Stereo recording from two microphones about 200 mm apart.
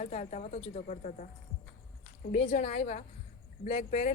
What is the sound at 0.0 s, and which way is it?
A man's voice, 35° left (ahead or behind).